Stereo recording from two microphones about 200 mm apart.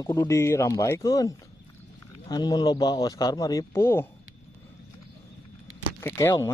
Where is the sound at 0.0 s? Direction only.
15° left (ahead or behind).